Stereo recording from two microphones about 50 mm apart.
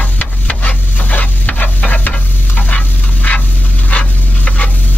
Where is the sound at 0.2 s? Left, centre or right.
Left.